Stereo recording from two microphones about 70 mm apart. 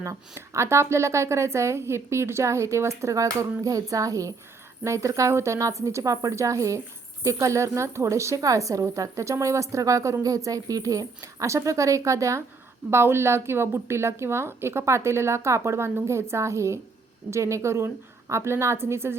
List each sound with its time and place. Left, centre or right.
0.3 s a woman's voice: right
4.8 s a woman's voice: right